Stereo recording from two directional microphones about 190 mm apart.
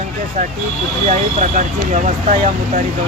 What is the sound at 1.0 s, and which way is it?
Speech, 40° right (ahead or behind).